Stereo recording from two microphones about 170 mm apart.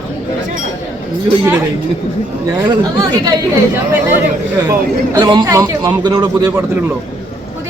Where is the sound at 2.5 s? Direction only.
20° right (ahead or behind).